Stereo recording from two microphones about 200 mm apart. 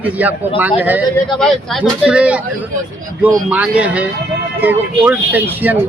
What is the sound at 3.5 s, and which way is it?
Speech, 5° right (ahead or behind).